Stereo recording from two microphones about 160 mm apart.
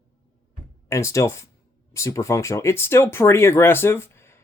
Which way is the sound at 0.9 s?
20° left (ahead or behind).